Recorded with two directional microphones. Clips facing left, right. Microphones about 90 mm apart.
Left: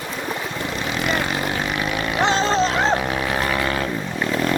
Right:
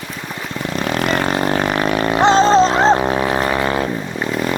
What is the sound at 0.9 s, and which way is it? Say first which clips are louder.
Vehicle: right 5 dB; 45° right (ahead or behind).